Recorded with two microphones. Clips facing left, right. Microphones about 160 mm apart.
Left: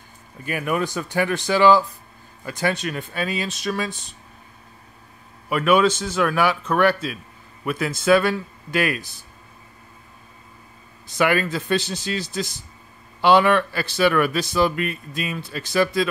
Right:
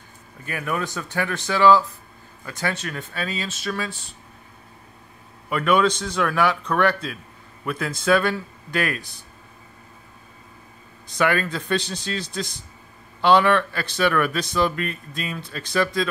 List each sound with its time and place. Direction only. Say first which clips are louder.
0.5 s speech: left 4 dB; 15° left (ahead or behind)
5.5 s speech: left 2 dB; 10° left (ahead or behind)
11.1 s speech: left 2 dB; 10° left (ahead or behind)